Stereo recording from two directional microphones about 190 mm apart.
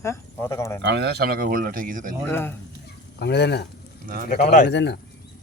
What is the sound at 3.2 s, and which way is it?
Speech, 60° left (ahead or behind).